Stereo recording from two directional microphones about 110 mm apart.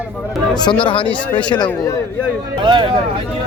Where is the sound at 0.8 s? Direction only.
50° left (ahead or behind).